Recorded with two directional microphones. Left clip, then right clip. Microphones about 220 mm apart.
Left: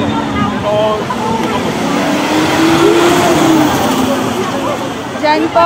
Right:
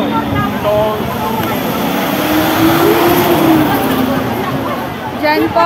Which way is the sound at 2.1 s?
15° right (ahead or behind).